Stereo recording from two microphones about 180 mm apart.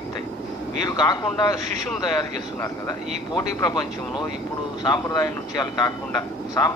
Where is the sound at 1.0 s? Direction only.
20° left (ahead or behind).